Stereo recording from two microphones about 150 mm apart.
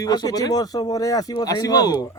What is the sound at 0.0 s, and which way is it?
Speech, 25° left (ahead or behind).